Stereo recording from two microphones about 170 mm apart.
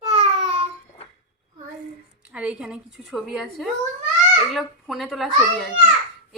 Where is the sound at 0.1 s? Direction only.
30° right (ahead or behind).